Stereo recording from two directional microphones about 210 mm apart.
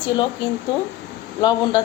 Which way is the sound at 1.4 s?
20° left (ahead or behind).